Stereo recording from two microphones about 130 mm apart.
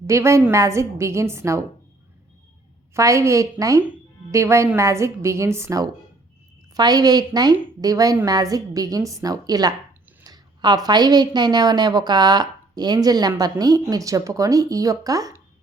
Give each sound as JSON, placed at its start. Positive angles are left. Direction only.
{"t": 0.1, "sound": "a woman's voice", "side_deg": -20}
{"t": 2.9, "sound": "a woman's voice", "side_deg": -25}